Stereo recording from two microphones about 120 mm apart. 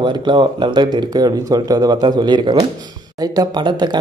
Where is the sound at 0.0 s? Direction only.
40° right (ahead or behind).